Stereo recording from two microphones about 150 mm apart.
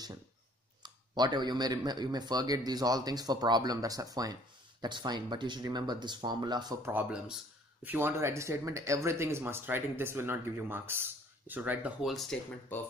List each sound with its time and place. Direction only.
0.8 s speech: 30° right (ahead or behind)
6.9 s speech: 10° right (ahead or behind)
12.7 s speech: 10° left (ahead or behind)